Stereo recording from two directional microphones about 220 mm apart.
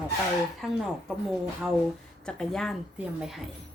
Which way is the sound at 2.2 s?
5° left (ahead or behind).